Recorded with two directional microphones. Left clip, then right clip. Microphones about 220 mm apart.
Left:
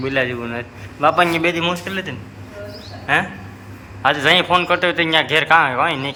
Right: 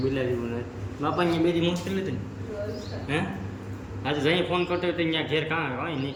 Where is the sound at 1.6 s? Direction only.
Centre (ahead or behind).